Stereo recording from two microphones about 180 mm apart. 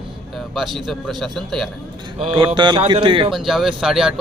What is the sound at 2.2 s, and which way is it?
A man's voice, 30° right (ahead or behind).